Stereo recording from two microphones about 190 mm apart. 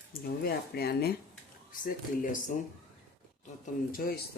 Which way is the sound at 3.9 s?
50° left (ahead or behind).